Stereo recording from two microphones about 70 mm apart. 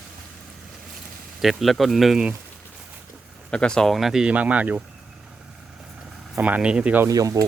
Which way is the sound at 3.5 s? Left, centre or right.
Centre.